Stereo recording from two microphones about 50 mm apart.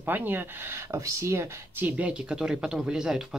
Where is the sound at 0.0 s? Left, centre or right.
Right.